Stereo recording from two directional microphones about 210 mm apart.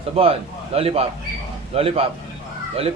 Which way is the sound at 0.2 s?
30° right (ahead or behind).